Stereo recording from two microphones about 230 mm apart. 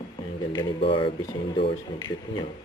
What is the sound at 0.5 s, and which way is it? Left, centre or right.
A woman's voice, left.